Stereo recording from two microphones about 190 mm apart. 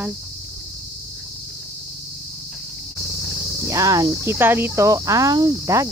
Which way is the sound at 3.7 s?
15° right (ahead or behind).